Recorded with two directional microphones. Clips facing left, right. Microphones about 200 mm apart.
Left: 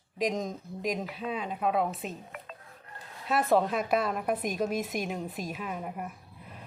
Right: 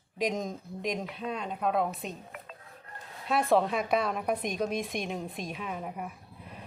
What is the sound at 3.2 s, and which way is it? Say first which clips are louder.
A woman's voice: even; centre (ahead or behind).